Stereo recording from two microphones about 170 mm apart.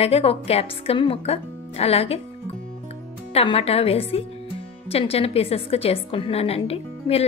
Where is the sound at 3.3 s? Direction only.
35° left (ahead or behind).